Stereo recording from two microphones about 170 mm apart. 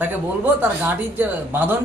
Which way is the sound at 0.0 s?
10° right (ahead or behind).